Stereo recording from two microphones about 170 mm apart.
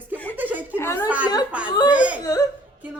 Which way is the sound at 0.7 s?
15° left (ahead or behind).